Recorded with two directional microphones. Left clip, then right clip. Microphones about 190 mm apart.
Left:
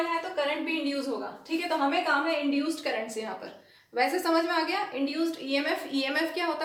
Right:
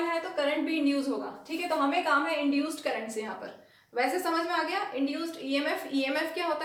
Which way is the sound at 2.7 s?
15° left (ahead or behind).